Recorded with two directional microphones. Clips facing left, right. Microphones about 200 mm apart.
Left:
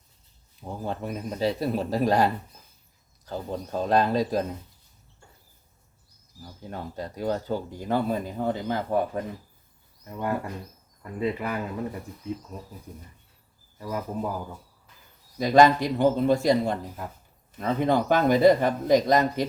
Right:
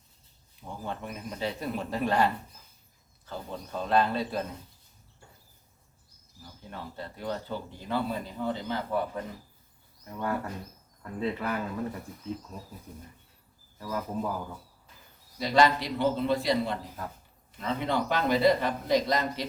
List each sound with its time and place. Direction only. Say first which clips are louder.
0.6 s speech: left 5 dB; 35° left (ahead or behind)
6.4 s speech: left 5 dB; 40° left (ahead or behind)
10.1 s speech: left 3 dB; 15° left (ahead or behind)
13.7 s speech: left 2 dB; 15° left (ahead or behind)
15.4 s speech: left 6 dB; 45° left (ahead or behind)